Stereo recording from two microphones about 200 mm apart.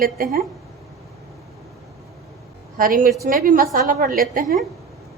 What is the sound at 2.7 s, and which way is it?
A woman's voice, 45° right (ahead or behind).